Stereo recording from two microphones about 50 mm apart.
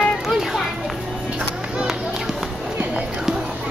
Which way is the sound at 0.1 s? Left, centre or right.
Centre.